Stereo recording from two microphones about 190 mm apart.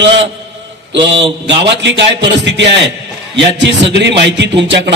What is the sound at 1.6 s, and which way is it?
A man's voice, 65° right (ahead or behind).